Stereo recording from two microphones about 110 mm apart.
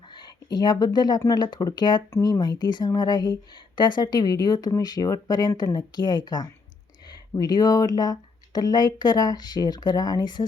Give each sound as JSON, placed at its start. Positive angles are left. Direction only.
{"t": 0.1, "sound": "a sound", "side_deg": 40}
{"t": 0.9, "sound": "speech", "side_deg": 40}
{"t": 2.0, "sound": "speech", "side_deg": 30}